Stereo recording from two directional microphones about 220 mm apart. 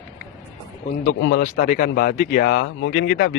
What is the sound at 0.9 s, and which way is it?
Speech, 40° left (ahead or behind).